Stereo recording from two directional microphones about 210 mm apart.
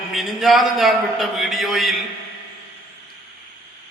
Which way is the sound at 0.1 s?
Centre (ahead or behind).